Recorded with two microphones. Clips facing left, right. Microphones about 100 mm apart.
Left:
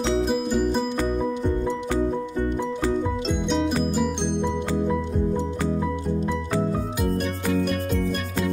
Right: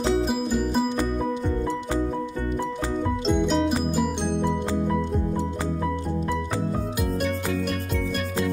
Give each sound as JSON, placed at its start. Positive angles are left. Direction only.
{"t": 0.2, "sound": "music", "side_deg": 0}
{"t": 3.3, "sound": "music", "side_deg": -5}